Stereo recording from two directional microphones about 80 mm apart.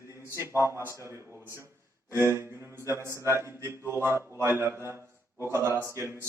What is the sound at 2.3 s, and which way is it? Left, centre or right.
Speech, right.